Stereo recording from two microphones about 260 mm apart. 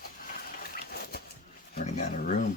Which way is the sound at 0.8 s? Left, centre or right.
Left.